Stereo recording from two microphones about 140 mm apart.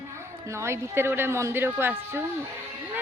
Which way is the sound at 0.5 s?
20° right (ahead or behind).